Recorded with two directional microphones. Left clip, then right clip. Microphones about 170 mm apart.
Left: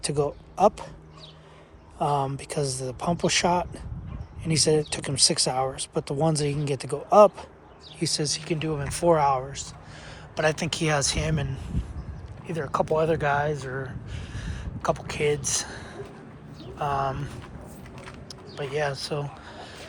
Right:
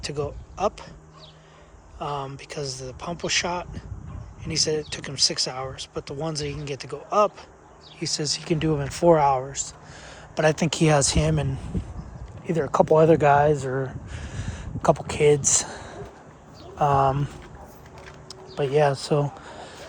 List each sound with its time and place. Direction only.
0.0 s speech: 5° right (ahead or behind)
2.0 s speech: 5° right (ahead or behind)
8.4 s speech: 40° right (ahead or behind)
18.5 s a sound: 50° right (ahead or behind)